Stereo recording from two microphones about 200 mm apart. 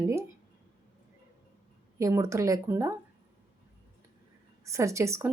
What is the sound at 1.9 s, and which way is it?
A woman's voice, 15° right (ahead or behind).